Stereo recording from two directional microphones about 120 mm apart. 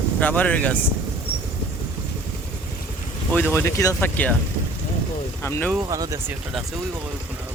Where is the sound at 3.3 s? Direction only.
15° left (ahead or behind).